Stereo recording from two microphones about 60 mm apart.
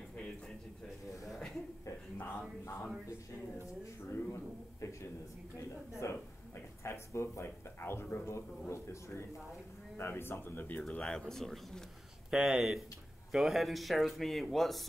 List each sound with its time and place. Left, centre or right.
1.3 s a sound: centre
2.6 s speech: left
4.1 s a man's voice: left
10.9 s speech: centre
12.3 s speech: centre